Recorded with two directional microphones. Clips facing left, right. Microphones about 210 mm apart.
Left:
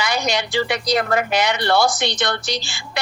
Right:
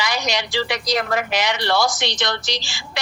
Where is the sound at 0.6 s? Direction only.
50° left (ahead or behind).